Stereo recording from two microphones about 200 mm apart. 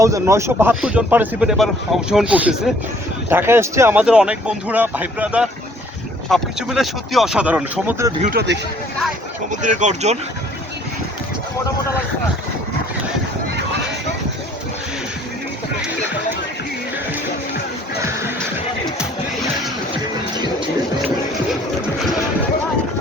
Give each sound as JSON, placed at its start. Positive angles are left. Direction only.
{"t": 0.0, "sound": "speech", "side_deg": -15}
{"t": 8.2, "sound": "speech", "side_deg": -50}
{"t": 9.5, "sound": "speech", "side_deg": -40}
{"t": 18.9, "sound": "music", "side_deg": 0}
{"t": 20.3, "sound": "music", "side_deg": -20}